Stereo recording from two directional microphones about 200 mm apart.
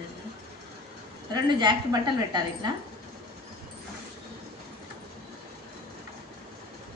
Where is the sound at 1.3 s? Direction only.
20° right (ahead or behind).